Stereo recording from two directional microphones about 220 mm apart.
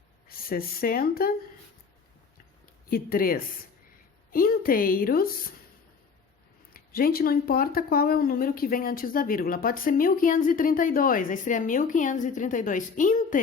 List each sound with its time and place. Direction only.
0.3 s speech: 40° left (ahead or behind)
2.8 s speech: 40° left (ahead or behind)
6.7 s speech: 40° left (ahead or behind)